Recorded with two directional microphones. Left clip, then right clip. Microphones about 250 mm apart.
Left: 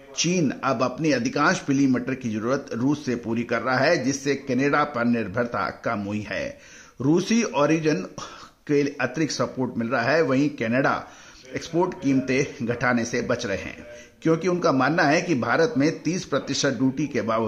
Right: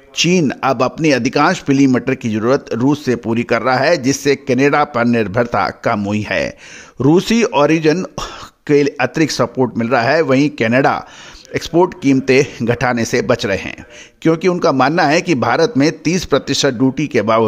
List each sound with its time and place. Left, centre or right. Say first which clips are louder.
0.1 s speech: right 10 dB; right